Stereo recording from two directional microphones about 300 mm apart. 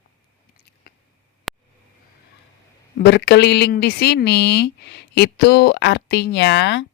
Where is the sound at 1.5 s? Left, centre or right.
Centre.